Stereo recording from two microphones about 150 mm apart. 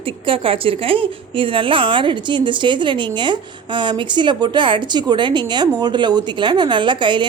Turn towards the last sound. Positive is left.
turn(degrees=-30)  # may be behind; listen again after turning